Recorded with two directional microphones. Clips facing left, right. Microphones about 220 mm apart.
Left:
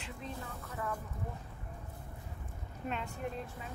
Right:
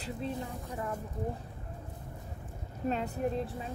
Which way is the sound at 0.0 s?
30° right (ahead or behind).